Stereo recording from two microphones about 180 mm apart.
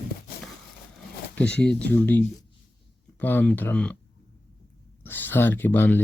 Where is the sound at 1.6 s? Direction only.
10° left (ahead or behind).